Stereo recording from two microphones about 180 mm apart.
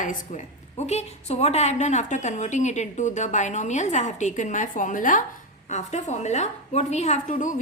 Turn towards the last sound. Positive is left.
turn(degrees=45)  # may be behind; listen again after turning